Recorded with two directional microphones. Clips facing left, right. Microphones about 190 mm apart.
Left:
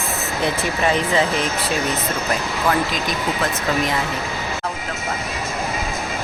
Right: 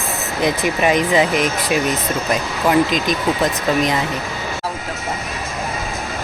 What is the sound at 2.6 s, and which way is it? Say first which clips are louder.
Speech: right 6 dB; 20° right (ahead or behind).